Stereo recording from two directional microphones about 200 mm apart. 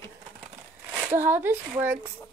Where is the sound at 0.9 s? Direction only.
10° right (ahead or behind).